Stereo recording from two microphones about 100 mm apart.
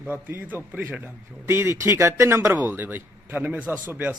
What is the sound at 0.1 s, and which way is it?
A man's voice, 20° right (ahead or behind).